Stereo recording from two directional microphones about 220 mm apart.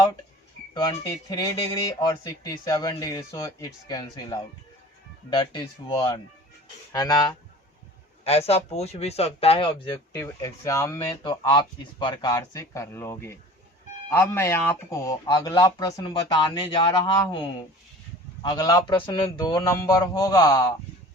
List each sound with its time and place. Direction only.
0.7 s speech: 15° left (ahead or behind)
5.4 s speech: 20° left (ahead or behind)
10.1 s speech: 15° left (ahead or behind)
18.4 s speech: 20° left (ahead or behind)